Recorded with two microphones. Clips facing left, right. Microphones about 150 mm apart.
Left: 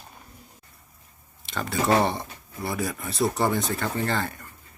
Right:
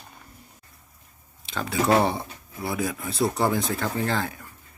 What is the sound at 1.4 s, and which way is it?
Speech, centre (ahead or behind).